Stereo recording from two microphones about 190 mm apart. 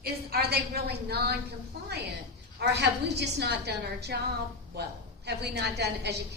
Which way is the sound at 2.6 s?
60° right (ahead or behind).